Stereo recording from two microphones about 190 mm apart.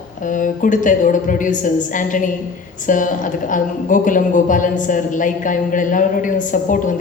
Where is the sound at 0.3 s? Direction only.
45° left (ahead or behind).